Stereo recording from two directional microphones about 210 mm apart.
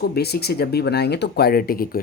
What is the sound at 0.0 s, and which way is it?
Speech, 50° left (ahead or behind).